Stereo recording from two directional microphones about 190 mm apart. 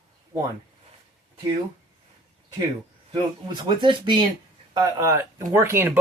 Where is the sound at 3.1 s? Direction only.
25° right (ahead or behind).